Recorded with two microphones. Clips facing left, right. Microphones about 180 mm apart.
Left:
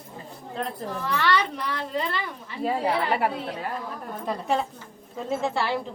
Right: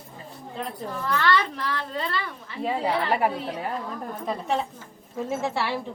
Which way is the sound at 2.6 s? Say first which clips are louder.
Even; centre (ahead or behind).